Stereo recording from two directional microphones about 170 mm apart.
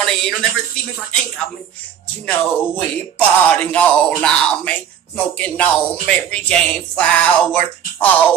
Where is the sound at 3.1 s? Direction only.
5° left (ahead or behind).